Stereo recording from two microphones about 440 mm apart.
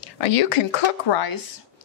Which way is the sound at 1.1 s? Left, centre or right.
Left.